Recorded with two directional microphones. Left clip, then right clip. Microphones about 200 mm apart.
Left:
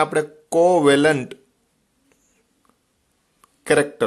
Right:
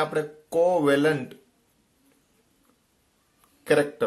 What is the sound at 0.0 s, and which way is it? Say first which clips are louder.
Speech: left 6 dB; 40° left (ahead or behind).